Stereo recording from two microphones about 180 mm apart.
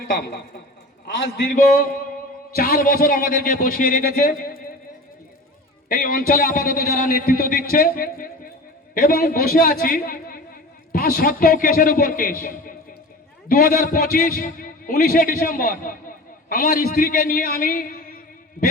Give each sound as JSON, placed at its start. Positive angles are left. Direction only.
{"t": 0.1, "sound": "a woman's voice", "side_deg": 60}
{"t": 1.4, "sound": "a man's voice", "side_deg": 55}
{"t": 5.9, "sound": "a man's voice", "side_deg": 50}